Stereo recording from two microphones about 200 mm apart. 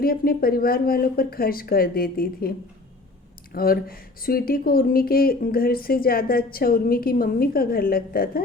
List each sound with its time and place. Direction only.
0.0 s speech: 45° left (ahead or behind)
3.5 s speech: 50° left (ahead or behind)